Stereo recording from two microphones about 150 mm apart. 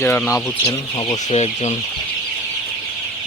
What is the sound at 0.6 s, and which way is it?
Speech, 25° left (ahead or behind).